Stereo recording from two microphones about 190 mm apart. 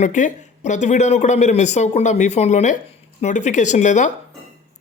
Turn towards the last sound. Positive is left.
turn(degrees=40)  # may be behind; listen again after turning